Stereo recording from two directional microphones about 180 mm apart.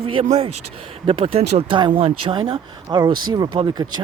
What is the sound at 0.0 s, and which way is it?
Speech, 30° right (ahead or behind).